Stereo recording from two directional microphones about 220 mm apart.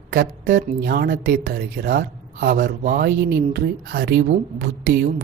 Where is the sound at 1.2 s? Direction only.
55° right (ahead or behind).